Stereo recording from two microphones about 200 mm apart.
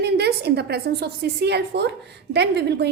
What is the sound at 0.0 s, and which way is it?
A woman's voice, 55° right (ahead or behind).